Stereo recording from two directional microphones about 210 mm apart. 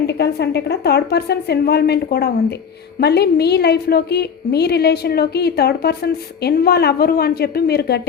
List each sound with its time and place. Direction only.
0.1 s a woman's voice: 50° left (ahead or behind)